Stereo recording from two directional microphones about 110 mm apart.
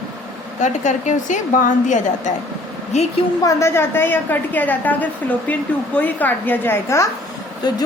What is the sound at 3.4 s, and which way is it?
A woman's voice, 30° left (ahead or behind).